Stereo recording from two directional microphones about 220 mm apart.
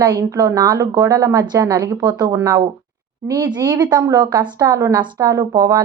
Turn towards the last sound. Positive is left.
turn(degrees=-15)  # may be behind; listen again after turning